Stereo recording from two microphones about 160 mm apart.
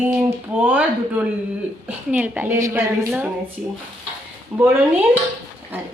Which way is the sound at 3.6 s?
5° right (ahead or behind).